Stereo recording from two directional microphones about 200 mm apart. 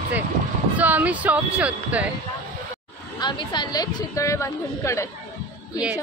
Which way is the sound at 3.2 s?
20° left (ahead or behind).